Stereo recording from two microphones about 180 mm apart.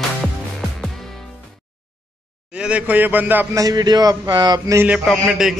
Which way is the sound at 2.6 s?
5° right (ahead or behind).